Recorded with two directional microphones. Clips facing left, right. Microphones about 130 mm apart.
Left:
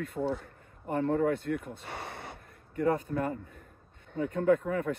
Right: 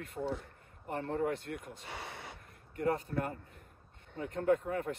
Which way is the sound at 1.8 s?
50° left (ahead or behind).